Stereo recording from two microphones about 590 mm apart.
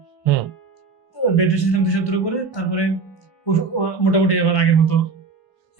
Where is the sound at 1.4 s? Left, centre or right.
Left.